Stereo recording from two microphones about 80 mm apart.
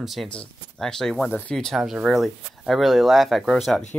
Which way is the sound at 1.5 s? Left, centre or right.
Centre.